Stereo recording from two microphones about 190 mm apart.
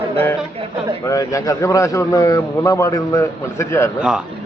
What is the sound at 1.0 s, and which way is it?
A man's voice, 20° left (ahead or behind).